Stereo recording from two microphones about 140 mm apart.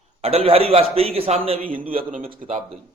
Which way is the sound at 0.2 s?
45° right (ahead or behind).